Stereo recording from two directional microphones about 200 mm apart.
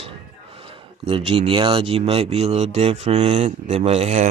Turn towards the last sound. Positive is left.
turn(degrees=-30)  # may be behind; listen again after turning